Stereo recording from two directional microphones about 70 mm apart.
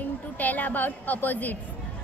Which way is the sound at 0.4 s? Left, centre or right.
Left.